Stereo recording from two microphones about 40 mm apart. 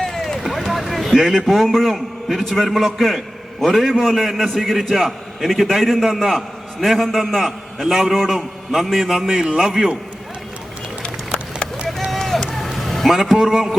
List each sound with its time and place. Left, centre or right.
0.0 s vehicle: centre
0.7 s a sound: centre
1.5 s a man's voice: centre
11.0 s a sound: left
12.5 s vehicle: centre
13.1 s a man's voice: centre